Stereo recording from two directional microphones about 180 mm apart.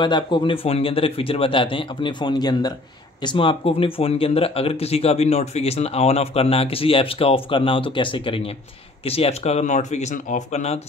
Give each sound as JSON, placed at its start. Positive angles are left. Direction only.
{"t": 0.0, "sound": "speech", "side_deg": 25}